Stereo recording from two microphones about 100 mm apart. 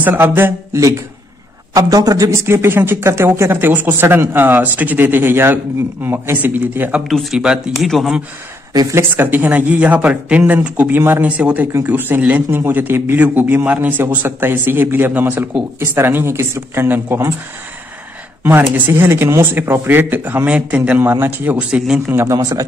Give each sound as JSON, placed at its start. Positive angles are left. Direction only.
{"t": 0.0, "sound": "speech", "side_deg": -20}
{"t": 1.8, "sound": "speech", "side_deg": -35}
{"t": 7.1, "sound": "speech", "side_deg": 0}
{"t": 8.9, "sound": "speech", "side_deg": -20}
{"t": 18.4, "sound": "speech", "side_deg": -20}
{"t": 22.1, "sound": "speech", "side_deg": -30}